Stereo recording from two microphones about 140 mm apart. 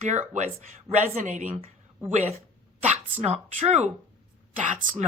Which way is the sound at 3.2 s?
50° right (ahead or behind).